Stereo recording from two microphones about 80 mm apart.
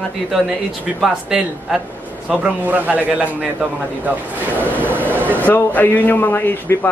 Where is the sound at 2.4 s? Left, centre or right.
Centre.